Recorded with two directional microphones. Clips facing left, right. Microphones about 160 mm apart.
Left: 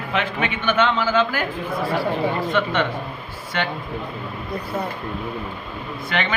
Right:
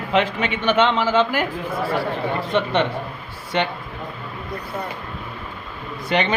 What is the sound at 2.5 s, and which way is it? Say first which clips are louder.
Speech: right 5 dB; 20° right (ahead or behind).